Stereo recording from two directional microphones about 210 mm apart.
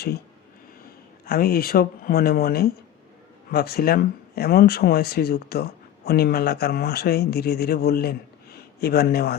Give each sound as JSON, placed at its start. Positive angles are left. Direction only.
{"t": 1.2, "sound": "speech", "side_deg": 45}